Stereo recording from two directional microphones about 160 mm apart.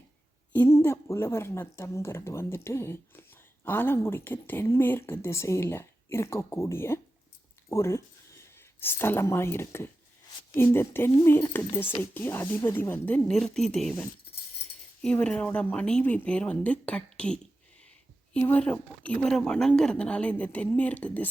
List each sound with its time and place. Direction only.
0.5 s a woman's voice: 15° left (ahead or behind)